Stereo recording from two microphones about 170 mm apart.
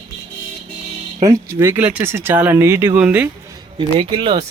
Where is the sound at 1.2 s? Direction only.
15° right (ahead or behind).